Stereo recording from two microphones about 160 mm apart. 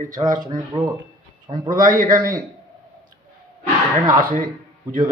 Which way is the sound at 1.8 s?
60° right (ahead or behind).